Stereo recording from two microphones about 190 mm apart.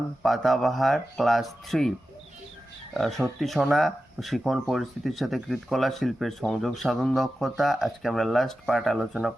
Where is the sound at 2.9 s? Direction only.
Centre (ahead or behind).